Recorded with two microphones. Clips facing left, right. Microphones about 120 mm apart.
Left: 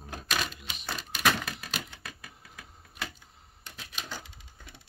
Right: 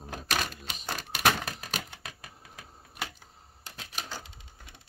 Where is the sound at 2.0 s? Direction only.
20° right (ahead or behind).